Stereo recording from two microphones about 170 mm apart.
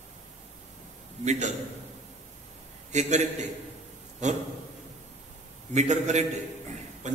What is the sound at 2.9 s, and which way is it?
Speech, 45° right (ahead or behind).